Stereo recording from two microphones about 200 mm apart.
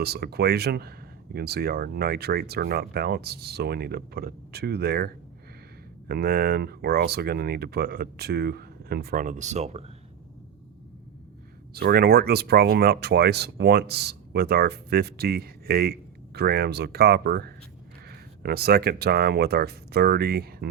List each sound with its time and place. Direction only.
0.0 s speech: 50° right (ahead or behind); by 9.8 s 35° right (ahead or behind)
11.7 s speech: 50° right (ahead or behind)